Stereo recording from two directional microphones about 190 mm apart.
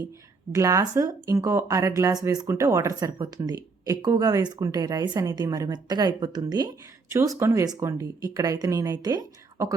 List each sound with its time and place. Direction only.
0.5 s speech: 15° right (ahead or behind)